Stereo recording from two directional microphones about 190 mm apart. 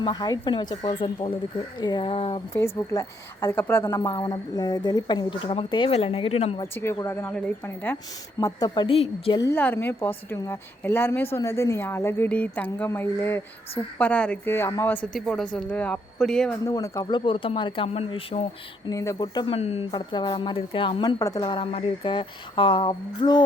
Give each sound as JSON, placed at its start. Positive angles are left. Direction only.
{"t": 0.0, "sound": "a woman's voice", "side_deg": 20}
{"t": 2.6, "sound": "a woman's voice", "side_deg": 15}
{"t": 6.7, "sound": "a woman's voice", "side_deg": 15}
{"t": 9.4, "sound": "speech", "side_deg": 10}
{"t": 16.6, "sound": "a woman's voice", "side_deg": 15}
{"t": 18.9, "sound": "a woman's voice", "side_deg": 20}
{"t": 19.5, "sound": "a woman's voice", "side_deg": 35}
{"t": 19.9, "sound": "a woman's voice", "side_deg": 25}